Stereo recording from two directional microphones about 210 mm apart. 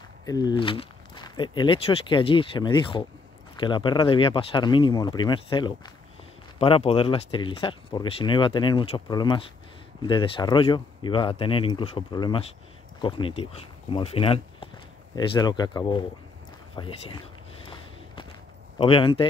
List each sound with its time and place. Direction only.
0.2 s speech: 20° left (ahead or behind)
18.8 s speech: 25° left (ahead or behind)